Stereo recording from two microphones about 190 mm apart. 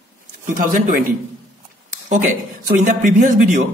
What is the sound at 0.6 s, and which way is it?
Speech, 45° right (ahead or behind).